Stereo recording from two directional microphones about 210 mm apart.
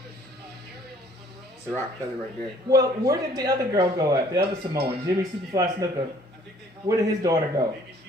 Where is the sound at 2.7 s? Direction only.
15° right (ahead or behind).